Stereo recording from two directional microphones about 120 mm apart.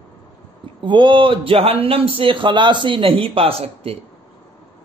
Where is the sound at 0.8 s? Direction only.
45° right (ahead or behind).